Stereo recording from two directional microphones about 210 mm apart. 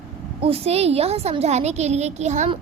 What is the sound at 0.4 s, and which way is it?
A woman's voice, 30° right (ahead or behind).